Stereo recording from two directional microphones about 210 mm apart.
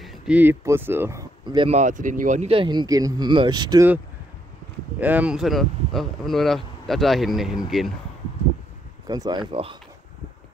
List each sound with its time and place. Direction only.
0.0 s speech: 5° right (ahead or behind)
1.4 s speech: 25° right (ahead or behind)
5.0 s speech: 5° right (ahead or behind)
9.0 s speech: 20° right (ahead or behind)